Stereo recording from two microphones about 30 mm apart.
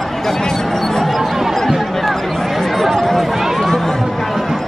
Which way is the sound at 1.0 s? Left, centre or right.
Centre.